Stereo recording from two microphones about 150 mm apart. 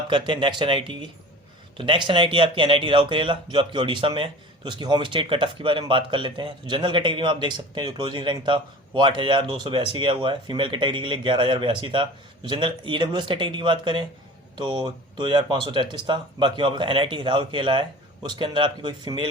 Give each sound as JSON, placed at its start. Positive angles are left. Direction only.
{"t": 0.1, "sound": "speech", "side_deg": -35}